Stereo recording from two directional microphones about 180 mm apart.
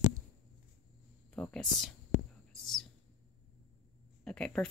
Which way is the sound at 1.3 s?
5° left (ahead or behind).